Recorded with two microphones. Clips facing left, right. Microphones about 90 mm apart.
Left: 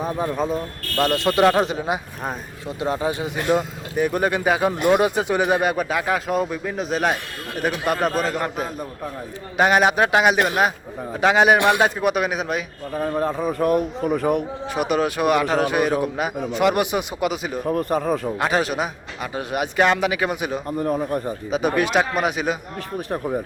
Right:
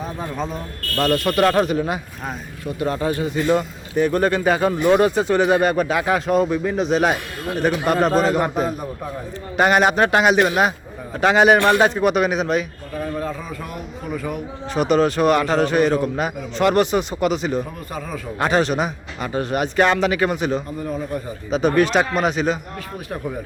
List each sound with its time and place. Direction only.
0.0 s speech: 10° left (ahead or behind)
9.6 s speech: centre (ahead or behind)
12.9 s a man's voice: 30° left (ahead or behind)
13.4 s speech: 50° left (ahead or behind)
14.8 s speech: 5° left (ahead or behind)
17.7 s speech: 55° left (ahead or behind)
18.3 s speech: 5° left (ahead or behind)
20.7 s speech: 50° left (ahead or behind)
21.5 s speech: 10° left (ahead or behind)
23.1 s speech: 30° left (ahead or behind)